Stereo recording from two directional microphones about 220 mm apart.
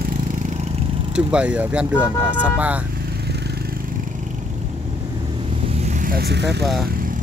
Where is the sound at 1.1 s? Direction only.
5° right (ahead or behind).